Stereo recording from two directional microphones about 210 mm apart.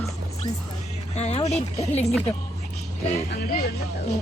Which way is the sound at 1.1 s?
30° left (ahead or behind).